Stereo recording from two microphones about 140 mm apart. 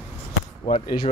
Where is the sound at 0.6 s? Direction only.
45° left (ahead or behind).